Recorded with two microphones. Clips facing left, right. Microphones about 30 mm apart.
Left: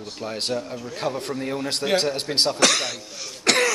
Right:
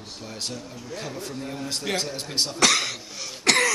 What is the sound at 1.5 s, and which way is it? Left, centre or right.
Speech, left.